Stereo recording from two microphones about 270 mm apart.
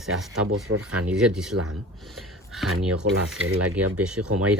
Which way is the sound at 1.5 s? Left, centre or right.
Right.